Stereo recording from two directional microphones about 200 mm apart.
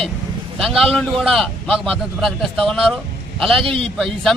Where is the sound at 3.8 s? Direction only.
Centre (ahead or behind).